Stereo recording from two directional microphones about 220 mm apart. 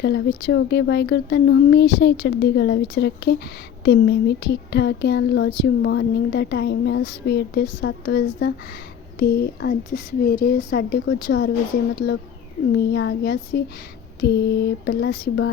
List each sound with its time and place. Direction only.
0.0 s speech: 50° left (ahead or behind)